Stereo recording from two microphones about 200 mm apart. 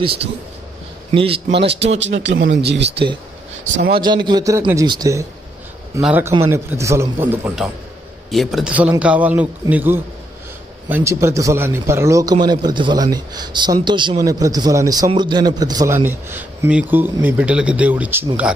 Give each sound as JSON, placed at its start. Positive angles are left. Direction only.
{"t": 0.0, "sound": "a man's voice", "side_deg": -25}
{"t": 1.9, "sound": "speech", "side_deg": -65}
{"t": 3.9, "sound": "a man's voice", "side_deg": -20}